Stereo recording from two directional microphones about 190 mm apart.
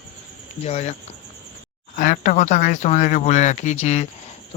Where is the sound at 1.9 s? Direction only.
45° left (ahead or behind).